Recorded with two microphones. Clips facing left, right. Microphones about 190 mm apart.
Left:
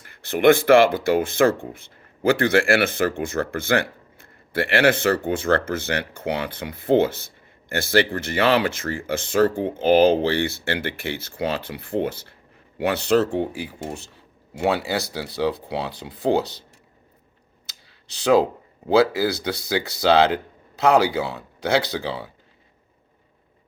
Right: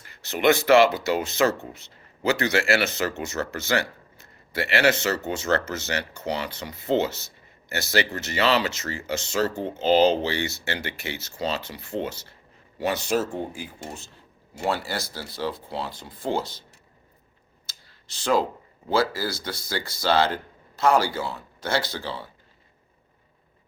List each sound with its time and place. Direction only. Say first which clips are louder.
0.0 s speech: left 5 dB; 55° left (ahead or behind)
18.1 s speech: left 6 dB; 65° left (ahead or behind)